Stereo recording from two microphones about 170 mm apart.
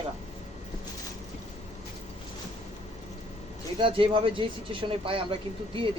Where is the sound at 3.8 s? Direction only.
30° right (ahead or behind).